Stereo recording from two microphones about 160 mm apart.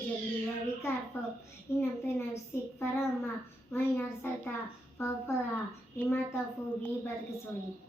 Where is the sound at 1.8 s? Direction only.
15° left (ahead or behind).